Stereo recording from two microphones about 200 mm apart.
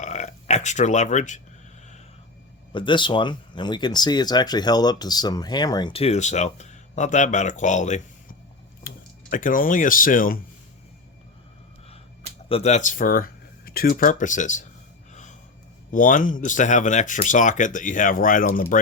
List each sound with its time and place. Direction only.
0.0 s burping: 35° left (ahead or behind)
2.7 s speech: 25° left (ahead or behind)
8.9 s a sound: 45° left (ahead or behind)
9.3 s speech: 40° left (ahead or behind)
12.5 s speech: 30° left (ahead or behind)
15.1 s gasp: 35° left (ahead or behind)
15.9 s speech: 40° left (ahead or behind)